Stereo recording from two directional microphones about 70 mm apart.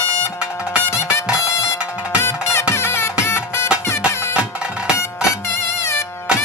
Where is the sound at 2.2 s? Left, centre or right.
Left.